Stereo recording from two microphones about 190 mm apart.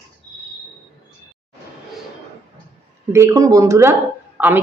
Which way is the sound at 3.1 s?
15° right (ahead or behind).